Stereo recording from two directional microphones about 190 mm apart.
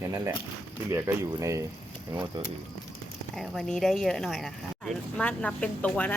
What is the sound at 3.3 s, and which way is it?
Speech, centre (ahead or behind).